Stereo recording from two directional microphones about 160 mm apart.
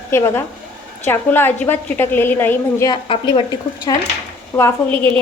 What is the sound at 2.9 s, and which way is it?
Speech, 30° left (ahead or behind).